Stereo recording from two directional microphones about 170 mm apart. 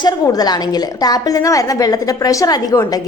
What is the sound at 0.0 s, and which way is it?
A woman's voice, 25° left (ahead or behind).